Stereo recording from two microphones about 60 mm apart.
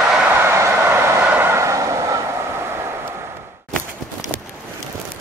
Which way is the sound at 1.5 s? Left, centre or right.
Right.